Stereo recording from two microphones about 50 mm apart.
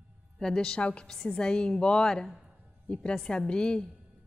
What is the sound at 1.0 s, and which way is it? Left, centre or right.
A woman's voice, centre.